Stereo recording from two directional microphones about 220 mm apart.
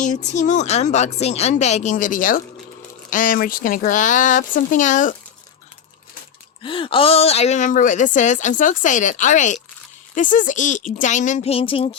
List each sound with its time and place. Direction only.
0.0 s a woman's voice: 30° left (ahead or behind)
6.6 s a woman's voice: 20° left (ahead or behind)